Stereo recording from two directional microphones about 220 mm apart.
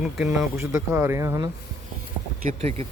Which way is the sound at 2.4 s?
30° right (ahead or behind).